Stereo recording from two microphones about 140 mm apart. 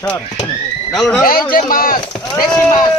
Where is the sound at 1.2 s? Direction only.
90° left.